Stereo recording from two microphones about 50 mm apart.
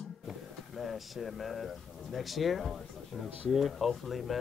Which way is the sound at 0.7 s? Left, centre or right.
Centre.